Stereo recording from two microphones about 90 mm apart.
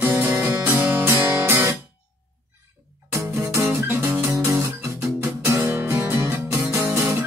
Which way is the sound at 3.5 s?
25° right (ahead or behind).